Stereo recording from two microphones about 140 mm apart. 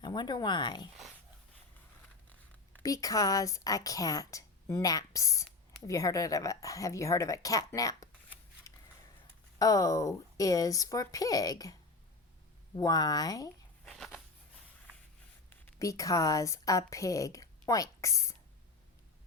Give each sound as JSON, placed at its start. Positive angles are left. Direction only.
{"t": 0.0, "sound": "speech", "side_deg": 30}
{"t": 2.8, "sound": "a woman's voice", "side_deg": 25}
{"t": 8.7, "sound": "a sound", "side_deg": 20}
{"t": 9.6, "sound": "a woman's voice", "side_deg": 25}
{"t": 13.8, "sound": "a sound", "side_deg": 5}
{"t": 15.4, "sound": "a woman's voice", "side_deg": 20}